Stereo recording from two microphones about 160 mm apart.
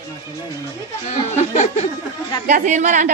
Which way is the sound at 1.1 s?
45° left (ahead or behind).